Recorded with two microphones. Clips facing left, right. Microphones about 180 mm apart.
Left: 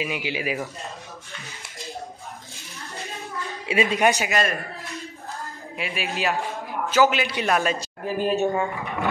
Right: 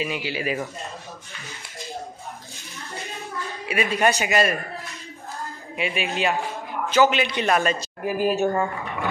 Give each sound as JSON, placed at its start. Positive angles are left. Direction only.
{"t": 0.0, "sound": "speech", "side_deg": 15}
{"t": 3.6, "sound": "speech", "side_deg": 25}
{"t": 4.3, "sound": "a man's voice", "side_deg": -5}